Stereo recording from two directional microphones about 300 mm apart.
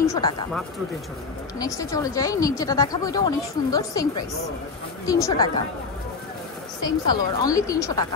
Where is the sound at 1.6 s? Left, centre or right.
Centre.